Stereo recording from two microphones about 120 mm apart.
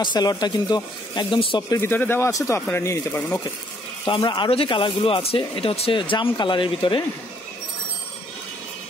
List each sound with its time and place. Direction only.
0.0 s speech: 35° left (ahead or behind)
1.7 s speech: 20° left (ahead or behind)
4.0 s speech: 40° left (ahead or behind)